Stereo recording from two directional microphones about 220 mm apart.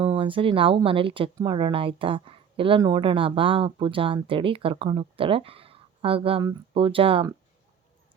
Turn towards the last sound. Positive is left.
turn(degrees=-25)  # may be behind; listen again after turning